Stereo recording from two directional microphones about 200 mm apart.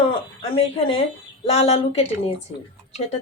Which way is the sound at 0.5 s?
25° left (ahead or behind).